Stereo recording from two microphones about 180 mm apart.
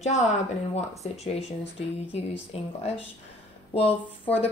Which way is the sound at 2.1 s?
35° left (ahead or behind).